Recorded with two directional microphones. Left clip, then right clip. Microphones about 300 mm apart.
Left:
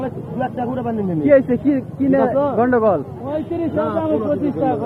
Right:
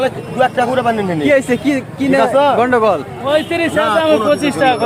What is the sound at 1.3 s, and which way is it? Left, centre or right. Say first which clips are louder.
Speech: even; centre.